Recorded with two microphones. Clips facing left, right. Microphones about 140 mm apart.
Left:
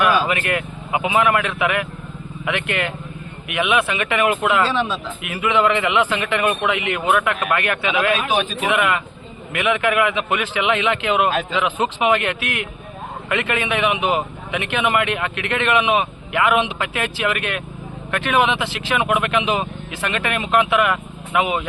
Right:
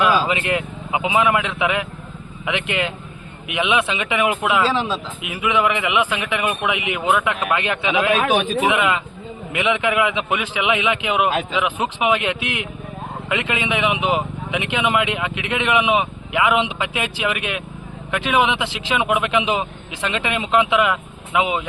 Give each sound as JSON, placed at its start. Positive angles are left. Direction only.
{"t": 0.0, "sound": "speech", "side_deg": -20}